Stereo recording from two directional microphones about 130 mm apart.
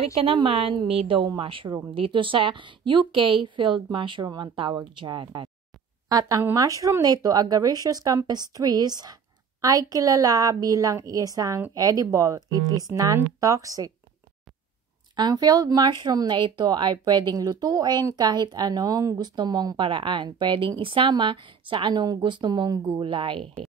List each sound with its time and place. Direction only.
0.2 s speech: 45° right (ahead or behind); by 13.9 s 25° right (ahead or behind)
15.1 s speech: 30° right (ahead or behind)